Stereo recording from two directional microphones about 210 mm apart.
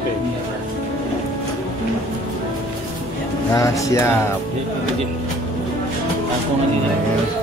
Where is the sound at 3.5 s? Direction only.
15° left (ahead or behind).